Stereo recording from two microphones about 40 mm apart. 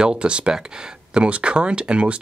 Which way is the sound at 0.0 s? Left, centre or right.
Right.